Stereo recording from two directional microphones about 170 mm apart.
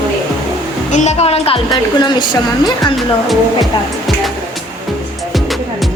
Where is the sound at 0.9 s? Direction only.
40° left (ahead or behind).